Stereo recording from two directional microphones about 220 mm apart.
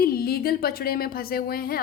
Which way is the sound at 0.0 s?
45° left (ahead or behind).